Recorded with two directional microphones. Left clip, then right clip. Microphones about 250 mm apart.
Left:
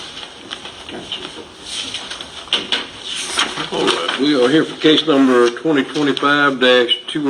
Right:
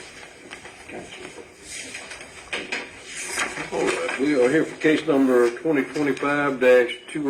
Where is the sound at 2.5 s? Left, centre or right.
Left.